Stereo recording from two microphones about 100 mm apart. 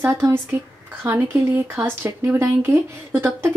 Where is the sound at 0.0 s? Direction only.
25° right (ahead or behind).